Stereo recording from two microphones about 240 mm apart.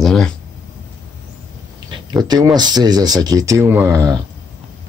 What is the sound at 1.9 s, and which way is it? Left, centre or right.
Speech, centre.